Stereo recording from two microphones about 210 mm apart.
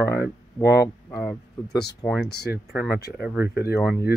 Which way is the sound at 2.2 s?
50° left (ahead or behind).